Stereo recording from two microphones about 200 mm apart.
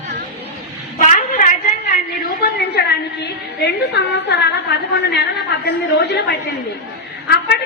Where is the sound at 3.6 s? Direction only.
55° left (ahead or behind).